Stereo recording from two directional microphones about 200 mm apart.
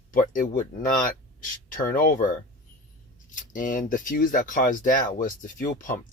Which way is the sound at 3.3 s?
40° left (ahead or behind).